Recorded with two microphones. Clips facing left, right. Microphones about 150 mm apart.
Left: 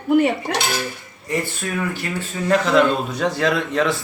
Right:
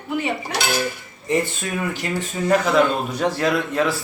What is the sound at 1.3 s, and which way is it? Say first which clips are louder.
Speech: right 2 dB; 20° right (ahead or behind).